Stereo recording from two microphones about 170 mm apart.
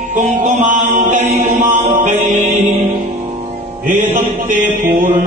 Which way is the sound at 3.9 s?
45° right (ahead or behind).